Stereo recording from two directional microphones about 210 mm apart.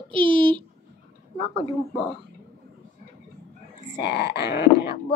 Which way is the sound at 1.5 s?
35° left (ahead or behind).